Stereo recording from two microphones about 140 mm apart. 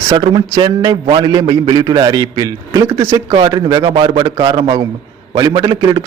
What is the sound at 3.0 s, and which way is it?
A man's voice, 45° right (ahead or behind).